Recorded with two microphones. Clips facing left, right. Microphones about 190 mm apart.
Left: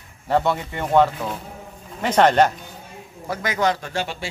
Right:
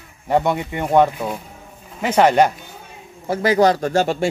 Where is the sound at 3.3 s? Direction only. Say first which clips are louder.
Right 7 dB; 30° right (ahead or behind).